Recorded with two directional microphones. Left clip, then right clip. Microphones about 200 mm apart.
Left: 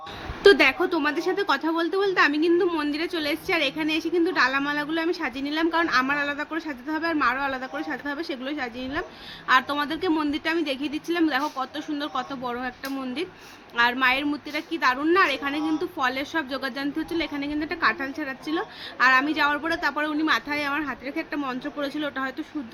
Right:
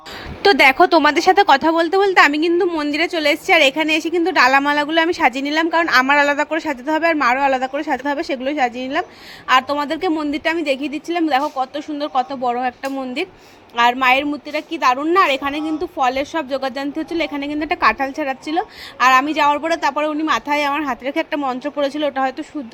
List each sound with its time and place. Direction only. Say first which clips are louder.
0.4 s a woman's voice: right 6 dB; 45° right (ahead or behind)
13.7 s speech: right 7 dB; 30° right (ahead or behind)